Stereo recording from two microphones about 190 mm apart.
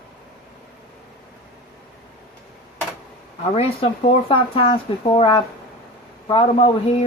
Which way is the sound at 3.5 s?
30° left (ahead or behind).